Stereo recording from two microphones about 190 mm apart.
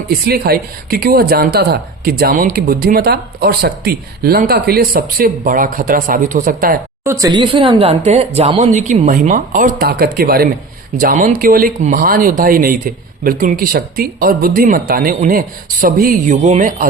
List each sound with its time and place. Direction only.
0.1 s speech: 55° right (ahead or behind)
7.0 s speech: 15° right (ahead or behind); by 16.8 s 40° right (ahead or behind)